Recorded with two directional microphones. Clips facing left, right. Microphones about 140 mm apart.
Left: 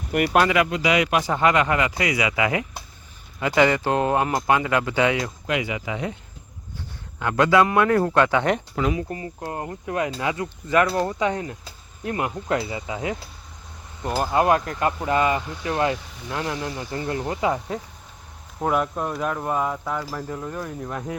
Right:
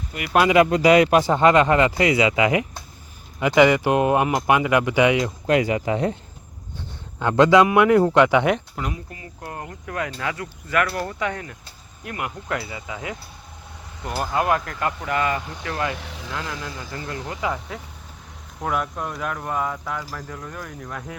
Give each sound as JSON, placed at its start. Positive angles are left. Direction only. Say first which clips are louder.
{"t": 0.1, "sound": "speech", "louder": "left 11 dB", "side_deg": 65}
{"t": 0.7, "sound": "speech", "louder": "right 6 dB", "side_deg": -40}
{"t": 5.5, "sound": "speech", "louder": "right 7 dB", "side_deg": -40}
{"t": 7.2, "sound": "speech", "louder": "right 3 dB", "side_deg": -25}
{"t": 8.7, "sound": "speech", "louder": "left 7 dB", "side_deg": 90}
{"t": 9.0, "sound": "speech", "louder": "left 6 dB", "side_deg": 35}
{"t": 14.2, "sound": "speech", "louder": "left 2 dB", "side_deg": 20}
{"t": 16.0, "sound": "speech", "louder": "right 6 dB", "side_deg": -85}
{"t": 16.3, "sound": "speech", "louder": "left 4 dB", "side_deg": 30}
{"t": 18.7, "sound": "speech", "louder": "left 2 dB", "side_deg": 15}